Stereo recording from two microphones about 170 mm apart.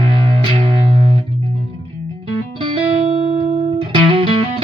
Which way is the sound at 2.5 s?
35° right (ahead or behind).